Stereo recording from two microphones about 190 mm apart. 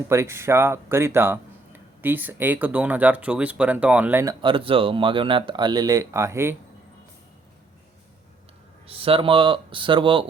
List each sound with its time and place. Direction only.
0.1 s speech: 15° right (ahead or behind)
4.4 s speech: 25° right (ahead or behind)
8.9 s speech: 30° right (ahead or behind)